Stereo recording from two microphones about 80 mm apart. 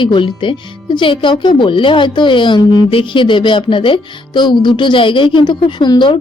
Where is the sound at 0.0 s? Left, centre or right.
Left.